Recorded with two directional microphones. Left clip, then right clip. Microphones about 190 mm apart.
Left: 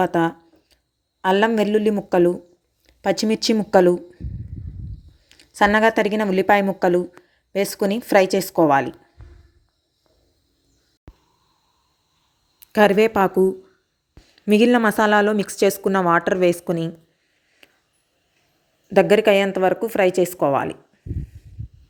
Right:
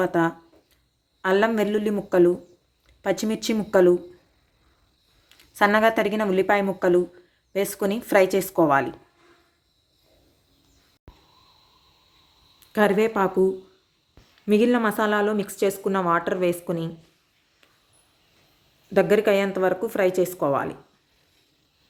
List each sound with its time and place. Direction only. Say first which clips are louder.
0.0 s a sound: left 3 dB; 25° left (ahead or behind)
1.2 s a woman's voice: left 3 dB; 25° left (ahead or behind)
5.3 s a woman's voice: left 3 dB; 25° left (ahead or behind)
12.5 s speech: left 5 dB; 30° left (ahead or behind)
17.6 s a sound: left 8 dB; 30° left (ahead or behind)
18.9 s a woman's voice: left 4 dB; 30° left (ahead or behind)